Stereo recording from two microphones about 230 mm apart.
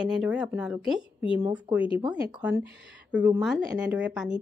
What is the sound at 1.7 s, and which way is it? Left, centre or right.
Speech, centre.